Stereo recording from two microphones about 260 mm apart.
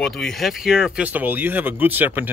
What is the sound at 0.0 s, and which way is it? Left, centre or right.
Speech, centre.